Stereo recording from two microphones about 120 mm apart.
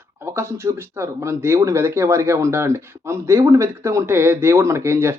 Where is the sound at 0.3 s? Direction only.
20° right (ahead or behind).